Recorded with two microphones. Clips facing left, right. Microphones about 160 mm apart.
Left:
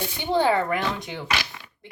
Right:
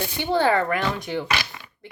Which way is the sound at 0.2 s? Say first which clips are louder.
Right 1 dB; 15° left (ahead or behind).